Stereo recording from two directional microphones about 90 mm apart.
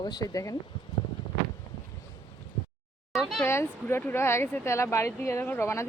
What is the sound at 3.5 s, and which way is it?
Speech, 30° left (ahead or behind).